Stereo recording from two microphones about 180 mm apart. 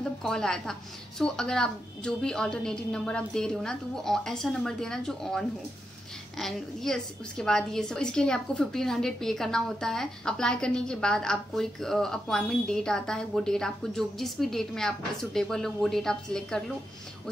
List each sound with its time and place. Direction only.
0.2 s a woman's voice: 5° left (ahead or behind)